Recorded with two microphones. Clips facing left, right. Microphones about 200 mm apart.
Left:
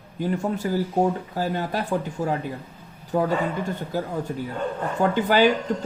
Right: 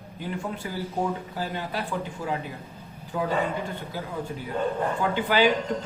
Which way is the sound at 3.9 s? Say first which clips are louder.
Left 10 dB; 45° left (ahead or behind).